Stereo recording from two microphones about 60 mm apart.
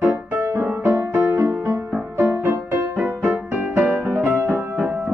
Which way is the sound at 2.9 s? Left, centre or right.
Right.